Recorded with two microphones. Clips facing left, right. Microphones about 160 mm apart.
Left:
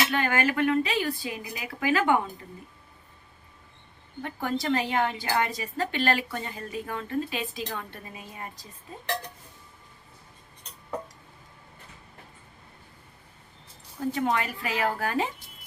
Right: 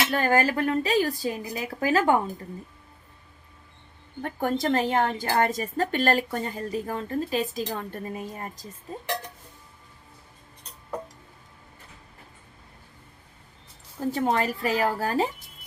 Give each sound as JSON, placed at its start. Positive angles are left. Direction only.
{"t": 0.1, "sound": "a woman's voice", "side_deg": -40}
{"t": 4.2, "sound": "a woman's voice", "side_deg": -45}
{"t": 14.1, "sound": "a woman's voice", "side_deg": -35}